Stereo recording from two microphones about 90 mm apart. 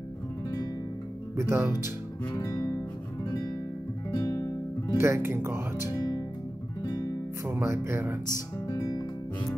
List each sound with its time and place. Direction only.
1.3 s speech: 30° right (ahead or behind)
2.3 s music: 40° left (ahead or behind)
4.1 s music: 45° left (ahead or behind)
4.9 s speech: 30° right (ahead or behind)
6.8 s guitar: 45° left (ahead or behind)
7.4 s speech: 25° right (ahead or behind)
8.6 s music: 40° left (ahead or behind)